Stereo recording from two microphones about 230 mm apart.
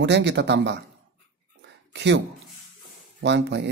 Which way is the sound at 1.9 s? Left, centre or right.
Right.